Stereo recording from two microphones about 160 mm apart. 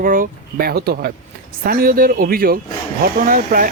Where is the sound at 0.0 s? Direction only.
60° right (ahead or behind).